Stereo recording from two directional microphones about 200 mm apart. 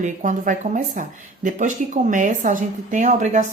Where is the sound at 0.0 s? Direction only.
40° right (ahead or behind).